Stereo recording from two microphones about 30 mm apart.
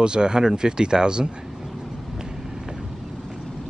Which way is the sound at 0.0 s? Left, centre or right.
Right.